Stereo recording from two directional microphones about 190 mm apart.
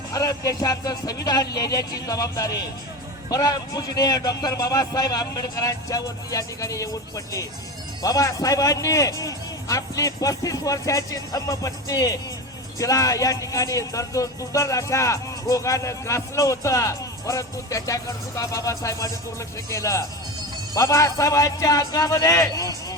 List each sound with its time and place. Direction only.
0.1 s speech: 20° left (ahead or behind)
8.0 s speech: 20° left (ahead or behind)